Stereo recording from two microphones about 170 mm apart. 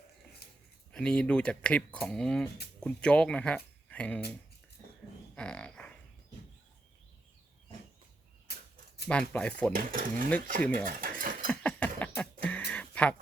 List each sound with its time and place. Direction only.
0.9 s speech: 5° left (ahead or behind)
5.3 s a sound: 5° left (ahead or behind)
9.0 s speech: 5° left (ahead or behind)
9.7 s speech: 55° right (ahead or behind)
11.0 s cutlery: 55° right (ahead or behind)
11.6 s a sound: 10° left (ahead or behind)